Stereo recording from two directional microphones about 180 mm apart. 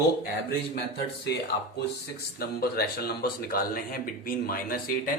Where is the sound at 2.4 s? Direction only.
60° left (ahead or behind).